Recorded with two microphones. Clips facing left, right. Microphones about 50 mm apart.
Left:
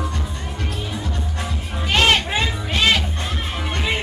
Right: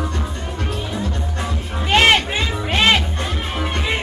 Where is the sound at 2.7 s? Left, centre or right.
Right.